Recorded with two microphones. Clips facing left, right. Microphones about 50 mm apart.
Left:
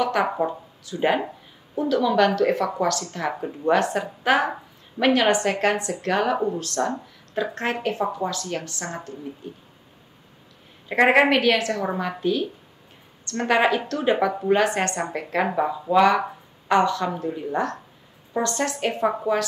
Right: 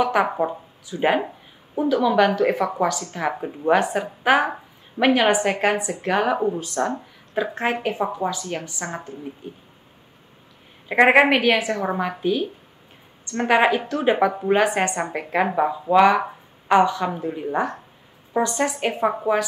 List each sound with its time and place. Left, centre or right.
0.0 s speech: centre
10.9 s speech: centre